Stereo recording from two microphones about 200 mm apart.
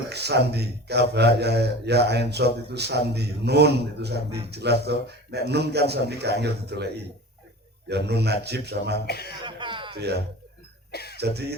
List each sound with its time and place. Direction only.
0.1 s a man's voice: 55° right (ahead or behind)
9.0 s speech: 55° left (ahead or behind)
9.4 s a sound: 25° right (ahead or behind)
9.9 s speech: 55° right (ahead or behind)
10.9 s cough: 55° left (ahead or behind)